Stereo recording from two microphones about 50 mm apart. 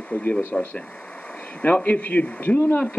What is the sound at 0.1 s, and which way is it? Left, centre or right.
Speech, left.